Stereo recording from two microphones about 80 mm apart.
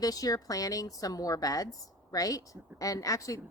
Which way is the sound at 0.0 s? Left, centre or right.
Left.